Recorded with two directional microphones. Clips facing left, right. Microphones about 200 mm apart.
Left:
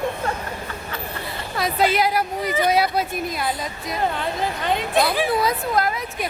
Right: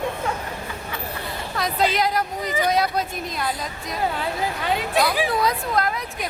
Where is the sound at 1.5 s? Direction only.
5° left (ahead or behind).